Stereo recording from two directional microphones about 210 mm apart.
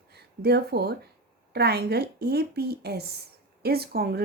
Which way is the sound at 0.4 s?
50° right (ahead or behind).